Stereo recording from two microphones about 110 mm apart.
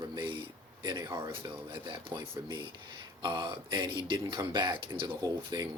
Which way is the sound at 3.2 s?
45° right (ahead or behind).